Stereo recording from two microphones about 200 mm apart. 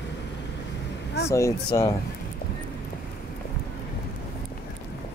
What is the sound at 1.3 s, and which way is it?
Speech, 15° left (ahead or behind).